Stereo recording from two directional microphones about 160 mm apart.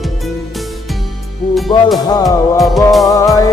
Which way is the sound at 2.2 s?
Centre (ahead or behind).